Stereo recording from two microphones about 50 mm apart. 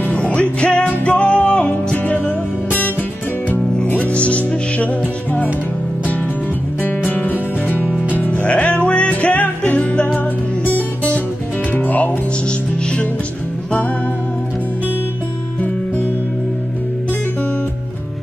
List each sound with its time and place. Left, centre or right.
0.1 s music: left
2.0 s music: left
7.1 s music: left
7.9 s music: right
8.2 s music: left